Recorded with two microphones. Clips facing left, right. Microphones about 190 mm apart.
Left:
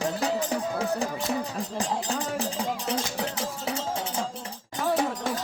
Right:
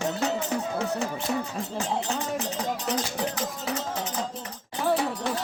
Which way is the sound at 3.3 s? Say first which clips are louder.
Even; 30° left (ahead or behind).